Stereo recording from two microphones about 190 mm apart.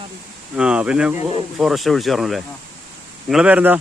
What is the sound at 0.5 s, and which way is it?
Speech, 5° right (ahead or behind).